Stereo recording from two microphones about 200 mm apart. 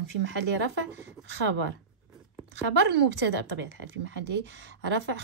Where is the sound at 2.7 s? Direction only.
60° right (ahead or behind).